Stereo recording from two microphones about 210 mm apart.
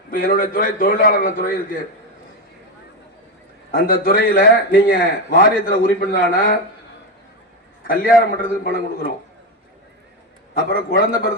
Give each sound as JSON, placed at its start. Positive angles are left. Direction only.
{"t": 0.1, "sound": "a man's voice", "side_deg": 40}
{"t": 3.7, "sound": "a man's voice", "side_deg": 45}
{"t": 7.9, "sound": "a man's voice", "side_deg": 40}
{"t": 10.7, "sound": "a man's voice", "side_deg": 45}